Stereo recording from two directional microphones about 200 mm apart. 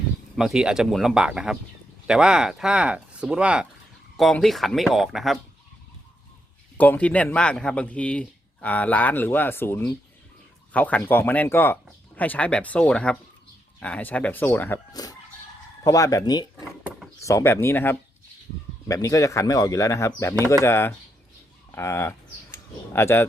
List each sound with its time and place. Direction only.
0.3 s speech: 5° right (ahead or behind)
6.7 s speech: 10° left (ahead or behind)